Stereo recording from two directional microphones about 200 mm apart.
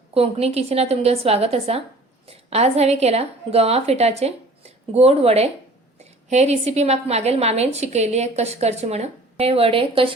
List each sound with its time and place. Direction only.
0.1 s a woman's voice: 30° right (ahead or behind)